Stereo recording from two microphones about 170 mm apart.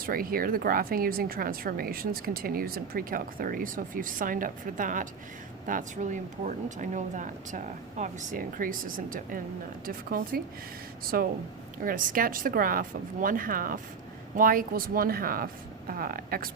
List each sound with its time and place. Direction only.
0.0 s a woman's voice: 60° right (ahead or behind)